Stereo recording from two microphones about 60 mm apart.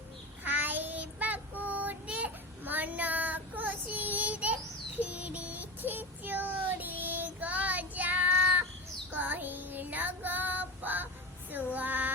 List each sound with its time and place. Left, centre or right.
0.4 s child singing: right